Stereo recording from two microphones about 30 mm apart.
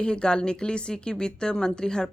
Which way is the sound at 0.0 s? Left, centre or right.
Left.